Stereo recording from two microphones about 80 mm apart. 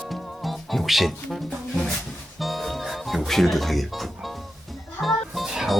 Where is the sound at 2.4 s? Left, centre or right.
Centre.